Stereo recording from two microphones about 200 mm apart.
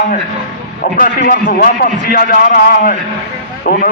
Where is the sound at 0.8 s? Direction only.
45° left (ahead or behind).